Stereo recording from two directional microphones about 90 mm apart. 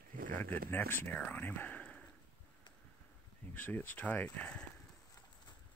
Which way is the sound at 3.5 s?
20° left (ahead or behind).